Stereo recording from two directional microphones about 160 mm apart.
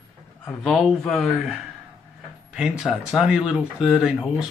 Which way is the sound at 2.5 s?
5° right (ahead or behind).